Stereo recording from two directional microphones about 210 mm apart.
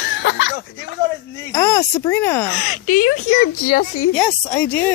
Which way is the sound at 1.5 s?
15° left (ahead or behind).